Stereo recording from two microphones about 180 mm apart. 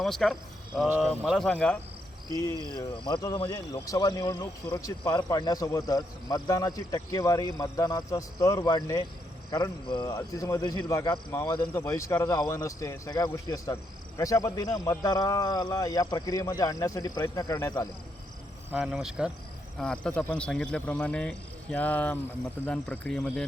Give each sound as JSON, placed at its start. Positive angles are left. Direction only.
{"t": 0.0, "sound": "speech", "side_deg": 0}
{"t": 2.6, "sound": "speech", "side_deg": 25}
{"t": 18.7, "sound": "speech", "side_deg": -5}